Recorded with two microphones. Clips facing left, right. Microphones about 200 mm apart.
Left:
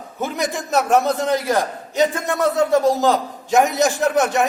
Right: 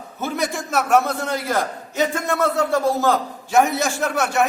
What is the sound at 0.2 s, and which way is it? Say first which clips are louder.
A man's voice: left 1 dB; 15° left (ahead or behind).